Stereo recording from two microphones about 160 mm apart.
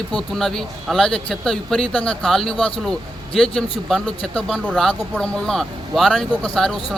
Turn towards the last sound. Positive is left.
turn(degrees=5)  # may be behind; listen again after turning